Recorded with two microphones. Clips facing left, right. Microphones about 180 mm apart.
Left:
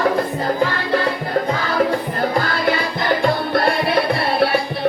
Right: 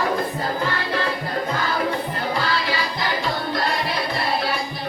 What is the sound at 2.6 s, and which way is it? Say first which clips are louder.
Music: left 5 dB; 55° left (ahead or behind).